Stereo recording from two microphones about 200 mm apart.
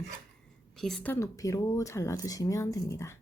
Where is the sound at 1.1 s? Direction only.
15° left (ahead or behind).